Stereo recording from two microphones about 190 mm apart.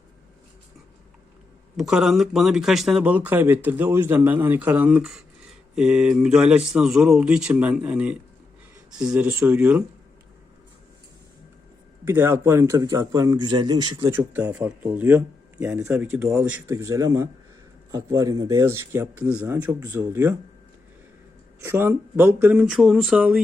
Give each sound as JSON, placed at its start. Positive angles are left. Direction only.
{"t": 1.7, "sound": "speech", "side_deg": -5}
{"t": 12.0, "sound": "speech", "side_deg": -10}
{"t": 14.1, "sound": "speech", "side_deg": -10}
{"t": 21.6, "sound": "speech", "side_deg": -10}